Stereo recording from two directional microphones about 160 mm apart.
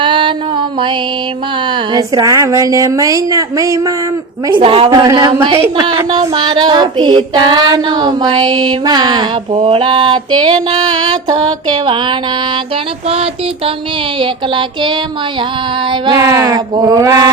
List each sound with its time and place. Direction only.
0.0 s mantra: 30° right (ahead or behind)
1.7 s child singing: 25° right (ahead or behind)
4.4 s child singing: 30° right (ahead or behind)
4.9 s child singing: 25° right (ahead or behind)
5.3 s child singing: 35° right (ahead or behind)
14.2 s child singing: 30° right (ahead or behind)